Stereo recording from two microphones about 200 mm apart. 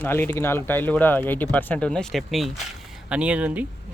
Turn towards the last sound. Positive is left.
turn(degrees=-5)  # may be behind; listen again after turning